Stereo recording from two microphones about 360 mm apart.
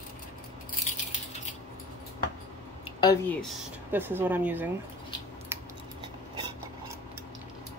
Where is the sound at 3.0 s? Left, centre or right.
Centre.